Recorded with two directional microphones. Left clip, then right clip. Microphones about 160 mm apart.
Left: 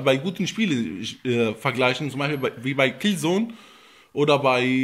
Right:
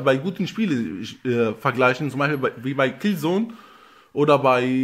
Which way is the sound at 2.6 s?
5° left (ahead or behind).